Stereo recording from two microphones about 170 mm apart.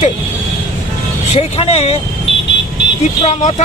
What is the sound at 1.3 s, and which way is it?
Speech, 35° left (ahead or behind).